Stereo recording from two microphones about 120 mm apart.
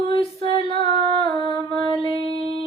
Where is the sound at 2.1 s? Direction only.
40° right (ahead or behind).